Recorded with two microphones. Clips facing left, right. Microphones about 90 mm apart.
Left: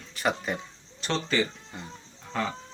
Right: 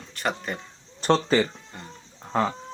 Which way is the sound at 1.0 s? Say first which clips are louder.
Right 7 dB; 40° right (ahead or behind).